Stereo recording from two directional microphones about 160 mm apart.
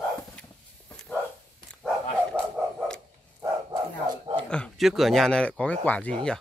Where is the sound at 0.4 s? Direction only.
5° left (ahead or behind).